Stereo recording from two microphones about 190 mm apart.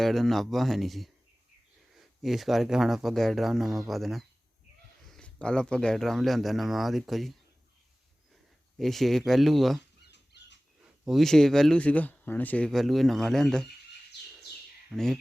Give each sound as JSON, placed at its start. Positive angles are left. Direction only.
{"t": 0.0, "sound": "speech", "side_deg": 0}
{"t": 8.8, "sound": "speech", "side_deg": 0}
{"t": 10.1, "sound": "a sound", "side_deg": 65}
{"t": 11.0, "sound": "speech", "side_deg": 0}
{"t": 14.9, "sound": "speech", "side_deg": 0}